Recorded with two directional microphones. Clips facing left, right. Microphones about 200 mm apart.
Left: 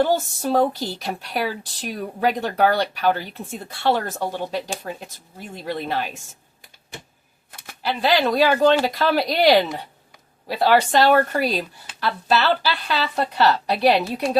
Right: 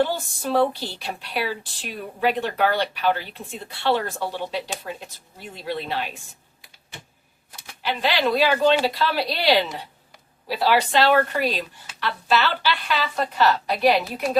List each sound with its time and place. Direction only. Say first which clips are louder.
0.0 s speech: left 3 dB; 45° left (ahead or behind)
7.7 s a woman's voice: left 4 dB; 40° left (ahead or behind)